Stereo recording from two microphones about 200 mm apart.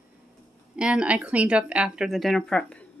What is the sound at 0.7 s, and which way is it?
Speech, 5° right (ahead or behind).